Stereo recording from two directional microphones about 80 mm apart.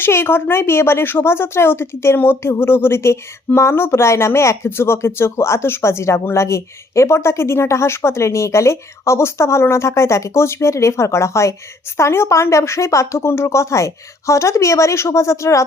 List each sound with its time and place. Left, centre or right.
0.0 s a woman's voice: left